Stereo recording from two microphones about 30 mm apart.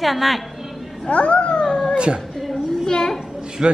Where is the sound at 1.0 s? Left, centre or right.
Left.